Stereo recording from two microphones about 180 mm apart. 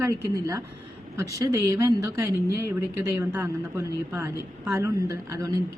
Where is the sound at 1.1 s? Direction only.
15° right (ahead or behind).